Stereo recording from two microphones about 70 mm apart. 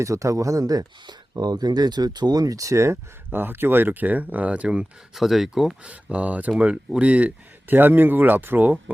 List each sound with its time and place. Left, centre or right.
0.0 s speech: right
3.2 s speech: right; by 5.7 s centre
5.8 s speech: centre